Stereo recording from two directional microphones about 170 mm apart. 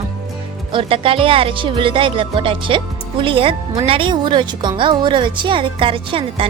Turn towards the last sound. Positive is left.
turn(degrees=-30)  # may be behind; listen again after turning